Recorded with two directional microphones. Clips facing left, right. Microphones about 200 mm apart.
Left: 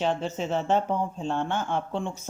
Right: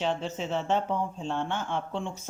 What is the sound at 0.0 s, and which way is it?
Speech, 45° left (ahead or behind).